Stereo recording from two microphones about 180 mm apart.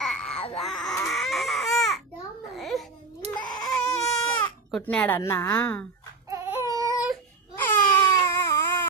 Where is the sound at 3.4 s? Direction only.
25° left (ahead or behind).